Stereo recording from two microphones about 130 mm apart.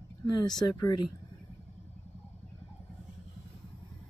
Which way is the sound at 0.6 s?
30° left (ahead or behind).